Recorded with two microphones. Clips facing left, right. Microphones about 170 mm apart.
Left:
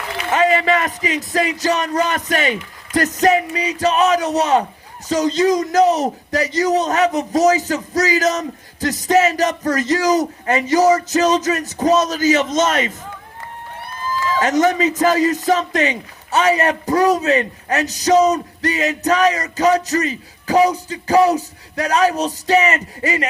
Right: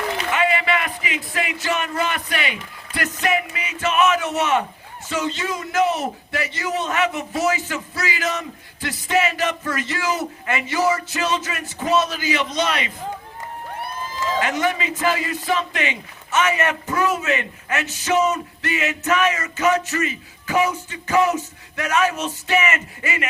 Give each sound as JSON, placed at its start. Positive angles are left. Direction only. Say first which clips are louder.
{"t": 0.3, "sound": "a man's voice", "louder": "left 7 dB", "side_deg": 40}
{"t": 14.3, "sound": "a man's voice", "louder": "left 7 dB", "side_deg": 40}